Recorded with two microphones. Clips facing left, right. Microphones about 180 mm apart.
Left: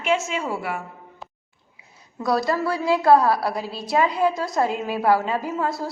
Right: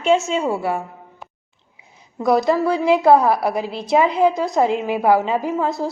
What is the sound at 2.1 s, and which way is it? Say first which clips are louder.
A woman's voice: right 5 dB; 20° right (ahead or behind).